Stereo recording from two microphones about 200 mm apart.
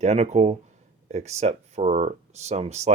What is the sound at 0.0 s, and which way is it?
Speech, 35° right (ahead or behind).